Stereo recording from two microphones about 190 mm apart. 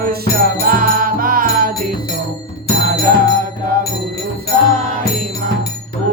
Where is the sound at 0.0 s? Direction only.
55° right (ahead or behind).